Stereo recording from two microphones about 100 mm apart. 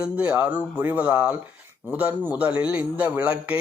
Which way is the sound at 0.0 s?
10° right (ahead or behind).